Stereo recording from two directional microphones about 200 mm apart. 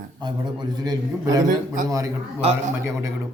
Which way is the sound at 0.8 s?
20° right (ahead or behind).